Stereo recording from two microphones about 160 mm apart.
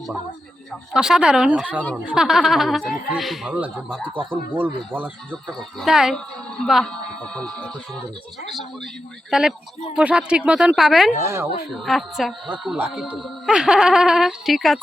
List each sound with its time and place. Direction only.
0.9 s a woman's voice: 5° right (ahead or behind)
4.1 s speech: 30° right (ahead or behind)
4.5 s a woman's voice: 10° right (ahead or behind); by 7.7 s 5° left (ahead or behind)
9.3 s a woman's voice: 5° right (ahead or behind)
11.2 s speech: 15° right (ahead or behind)
11.9 s a woman's voice: centre (ahead or behind)